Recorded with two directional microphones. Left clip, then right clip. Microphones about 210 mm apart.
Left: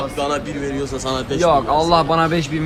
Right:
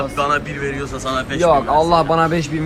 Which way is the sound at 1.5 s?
Centre (ahead or behind).